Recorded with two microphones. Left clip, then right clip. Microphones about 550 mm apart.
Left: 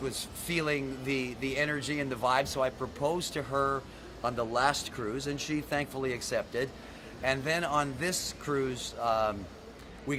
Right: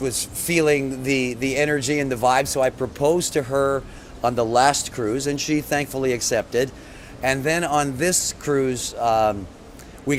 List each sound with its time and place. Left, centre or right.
0.0 s speech: right